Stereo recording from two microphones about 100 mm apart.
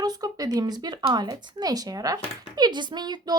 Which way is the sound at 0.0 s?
40° right (ahead or behind).